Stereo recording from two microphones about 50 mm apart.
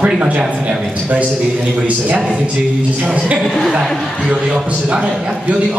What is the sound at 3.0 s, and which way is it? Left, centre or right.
Speech, right.